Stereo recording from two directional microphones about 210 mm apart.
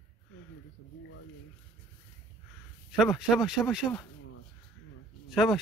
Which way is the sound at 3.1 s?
Centre (ahead or behind).